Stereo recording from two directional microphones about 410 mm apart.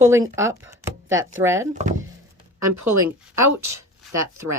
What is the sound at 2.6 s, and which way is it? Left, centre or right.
Speech, right.